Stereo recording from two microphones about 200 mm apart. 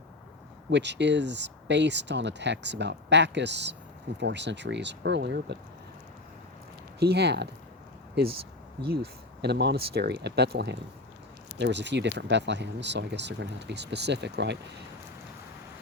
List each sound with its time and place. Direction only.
0.7 s speech: 60° right (ahead or behind)
7.0 s speech: 55° right (ahead or behind)
9.4 s speech: 55° right (ahead or behind)